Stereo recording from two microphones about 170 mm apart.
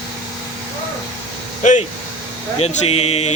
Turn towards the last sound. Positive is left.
turn(degrees=35)  # may be behind; listen again after turning